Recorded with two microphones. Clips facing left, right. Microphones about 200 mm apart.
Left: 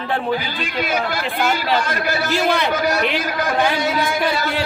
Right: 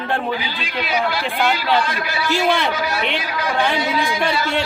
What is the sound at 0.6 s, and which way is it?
Speech, 45° left (ahead or behind).